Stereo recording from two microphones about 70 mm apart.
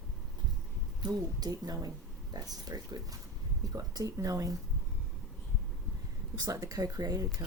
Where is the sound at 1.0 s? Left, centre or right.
Right.